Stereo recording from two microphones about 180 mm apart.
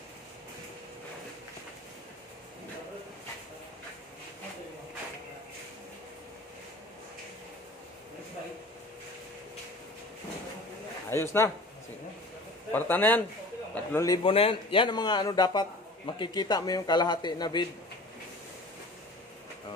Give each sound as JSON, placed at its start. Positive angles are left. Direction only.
{"t": 11.1, "sound": "a man's voice", "side_deg": 15}
{"t": 12.7, "sound": "a man's voice", "side_deg": 10}